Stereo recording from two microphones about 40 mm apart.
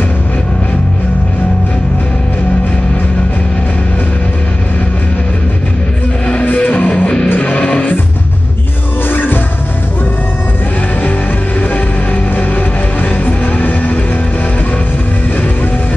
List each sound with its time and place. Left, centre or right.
6.4 s music: left
9.1 s music: left
11.7 s music: left